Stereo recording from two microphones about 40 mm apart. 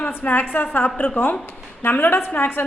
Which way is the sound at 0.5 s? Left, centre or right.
Left.